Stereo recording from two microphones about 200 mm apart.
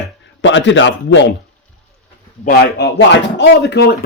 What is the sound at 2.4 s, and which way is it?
Speech, 50° left (ahead or behind).